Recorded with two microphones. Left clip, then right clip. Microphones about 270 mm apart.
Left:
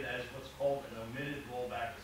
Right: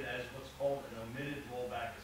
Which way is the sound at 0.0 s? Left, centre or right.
Centre.